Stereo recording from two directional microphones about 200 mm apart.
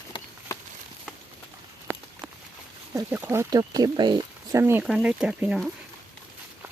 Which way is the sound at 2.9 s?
10° right (ahead or behind).